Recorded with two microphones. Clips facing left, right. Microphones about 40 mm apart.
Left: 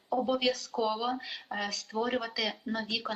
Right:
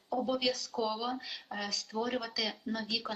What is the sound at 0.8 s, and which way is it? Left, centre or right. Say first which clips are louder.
A woman's voice: left 3 dB; centre.